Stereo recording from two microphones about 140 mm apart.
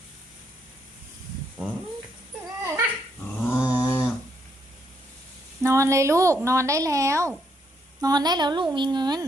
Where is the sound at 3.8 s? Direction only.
20° left (ahead or behind).